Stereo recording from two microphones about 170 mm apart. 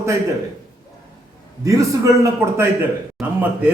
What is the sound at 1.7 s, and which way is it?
A man's voice, 20° right (ahead or behind).